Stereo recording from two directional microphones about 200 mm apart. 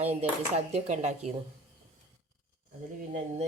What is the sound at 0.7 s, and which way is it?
Speech, 35° right (ahead or behind).